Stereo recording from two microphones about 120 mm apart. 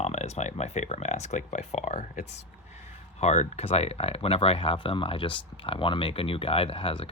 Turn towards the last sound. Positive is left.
turn(degrees=50)  # may be behind; listen again after turning